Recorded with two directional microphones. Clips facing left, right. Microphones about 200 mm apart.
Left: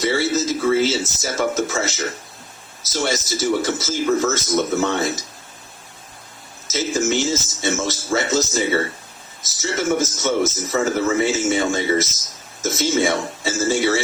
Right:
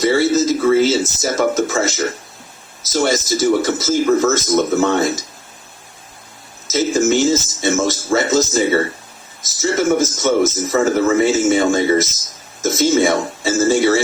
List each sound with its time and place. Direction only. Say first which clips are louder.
0.0 s speech: right 6 dB; 45° right (ahead or behind)
6.7 s speech: right 6 dB; 50° right (ahead or behind)